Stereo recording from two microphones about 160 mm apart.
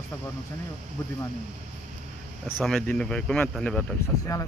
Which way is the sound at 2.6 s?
5° left (ahead or behind).